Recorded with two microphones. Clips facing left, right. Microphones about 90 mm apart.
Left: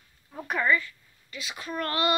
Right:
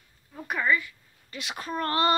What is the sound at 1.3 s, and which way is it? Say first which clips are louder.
Speech: right 1 dB; 45° right (ahead or behind).